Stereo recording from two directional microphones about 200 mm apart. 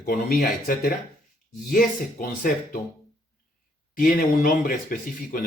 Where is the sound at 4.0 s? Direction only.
50° left (ahead or behind).